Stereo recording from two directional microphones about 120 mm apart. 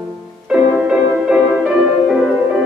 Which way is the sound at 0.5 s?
10° right (ahead or behind).